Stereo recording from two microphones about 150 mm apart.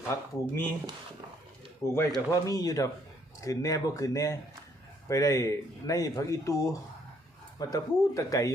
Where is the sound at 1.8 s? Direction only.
20° left (ahead or behind).